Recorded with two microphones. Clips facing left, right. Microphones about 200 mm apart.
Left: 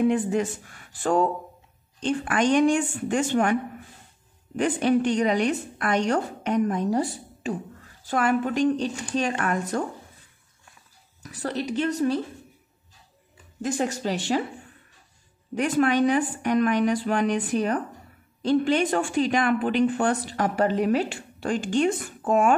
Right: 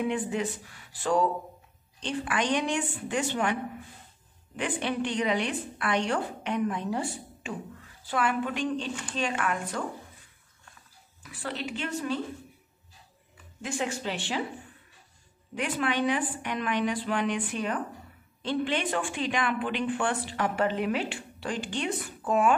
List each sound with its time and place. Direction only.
0.0 s a woman's voice: 45° left (ahead or behind)
4.6 s a woman's voice: 45° left (ahead or behind)
11.2 s a woman's voice: 40° left (ahead or behind)
13.6 s a woman's voice: 40° left (ahead or behind)
15.5 s a woman's voice: 45° left (ahead or behind)